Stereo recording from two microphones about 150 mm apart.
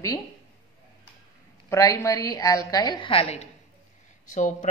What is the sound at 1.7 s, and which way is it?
A woman's voice, 20° left (ahead or behind).